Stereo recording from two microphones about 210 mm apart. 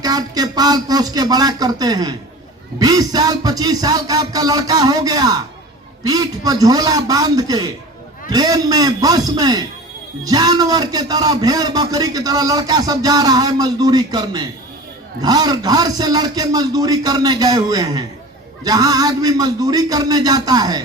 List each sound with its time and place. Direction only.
0.0 s a man's voice: 20° right (ahead or behind)